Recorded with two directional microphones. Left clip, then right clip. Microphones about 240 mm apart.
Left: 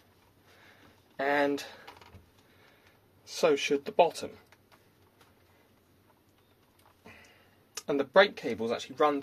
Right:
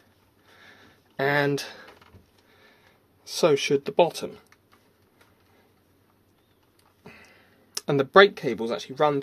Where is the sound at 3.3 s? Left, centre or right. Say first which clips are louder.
Right 5 dB; right.